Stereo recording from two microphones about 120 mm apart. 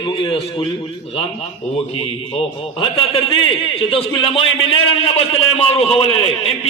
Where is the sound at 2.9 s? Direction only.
45° left (ahead or behind).